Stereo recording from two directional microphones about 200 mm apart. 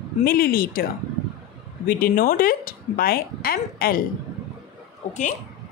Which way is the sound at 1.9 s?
45° left (ahead or behind).